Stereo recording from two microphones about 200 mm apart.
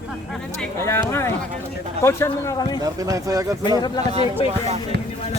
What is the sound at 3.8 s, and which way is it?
Speech, 20° left (ahead or behind).